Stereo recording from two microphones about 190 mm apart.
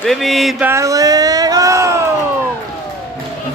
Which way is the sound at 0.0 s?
Centre (ahead or behind).